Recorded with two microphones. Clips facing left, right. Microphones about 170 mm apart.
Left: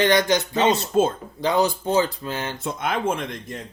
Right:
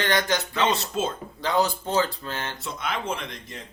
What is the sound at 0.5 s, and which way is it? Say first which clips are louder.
Speech: left 7 dB; 45° left (ahead or behind).